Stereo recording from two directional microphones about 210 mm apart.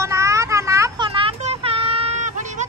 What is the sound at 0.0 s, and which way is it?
Vehicle, 15° right (ahead or behind).